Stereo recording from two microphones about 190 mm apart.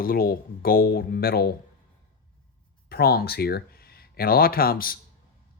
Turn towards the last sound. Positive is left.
turn(degrees=50)  # may be behind; listen again after turning